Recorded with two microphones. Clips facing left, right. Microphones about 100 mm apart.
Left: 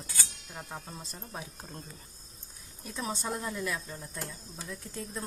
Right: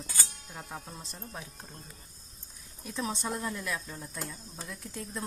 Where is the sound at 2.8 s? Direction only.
Centre (ahead or behind).